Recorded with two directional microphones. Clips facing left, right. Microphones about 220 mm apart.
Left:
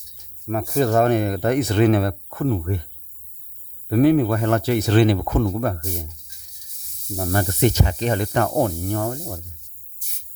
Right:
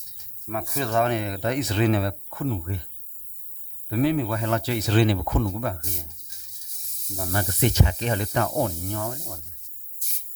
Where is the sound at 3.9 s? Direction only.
50° left (ahead or behind).